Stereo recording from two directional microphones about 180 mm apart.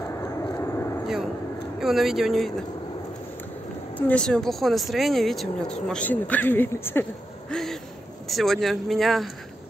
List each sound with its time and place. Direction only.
0.2 s vehicle: 15° left (ahead or behind)
1.0 s vehicle: centre (ahead or behind)
1.8 s speech: centre (ahead or behind)
4.1 s speech: 5° left (ahead or behind)